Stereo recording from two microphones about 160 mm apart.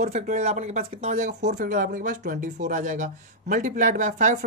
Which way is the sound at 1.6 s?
60° right (ahead or behind).